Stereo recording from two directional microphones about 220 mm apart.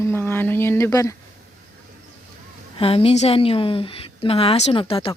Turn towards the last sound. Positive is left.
turn(degrees=25)  # may be behind; listen again after turning